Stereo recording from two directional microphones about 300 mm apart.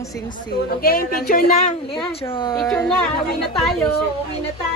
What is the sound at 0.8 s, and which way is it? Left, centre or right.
Speech, left.